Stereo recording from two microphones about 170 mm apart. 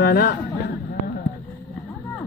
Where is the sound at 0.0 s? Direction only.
65° left (ahead or behind).